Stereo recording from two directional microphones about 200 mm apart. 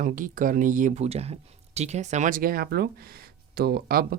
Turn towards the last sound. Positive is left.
turn(degrees=-50)  # may be behind; listen again after turning